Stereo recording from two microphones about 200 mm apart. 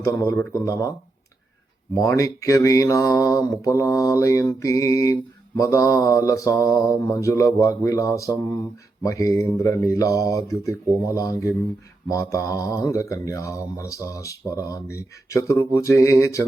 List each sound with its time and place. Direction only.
0.0 s speech: 15° left (ahead or behind)